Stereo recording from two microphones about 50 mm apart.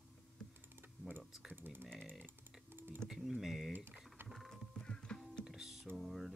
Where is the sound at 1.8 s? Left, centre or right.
Centre.